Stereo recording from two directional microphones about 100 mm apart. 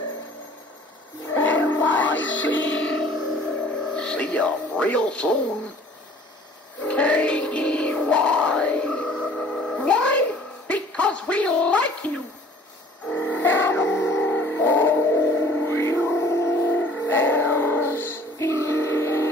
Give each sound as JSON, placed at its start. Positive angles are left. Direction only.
{"t": 1.3, "sound": "music", "side_deg": 20}
{"t": 3.9, "sound": "speech", "side_deg": 10}
{"t": 6.9, "sound": "music", "side_deg": 10}
{"t": 10.7, "sound": "a sound", "side_deg": 10}
{"t": 13.1, "sound": "music", "side_deg": 20}